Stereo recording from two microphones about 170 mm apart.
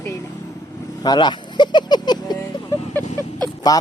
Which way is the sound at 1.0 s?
25° left (ahead or behind).